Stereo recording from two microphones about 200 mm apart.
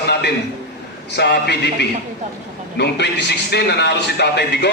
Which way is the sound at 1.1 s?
55° left (ahead or behind).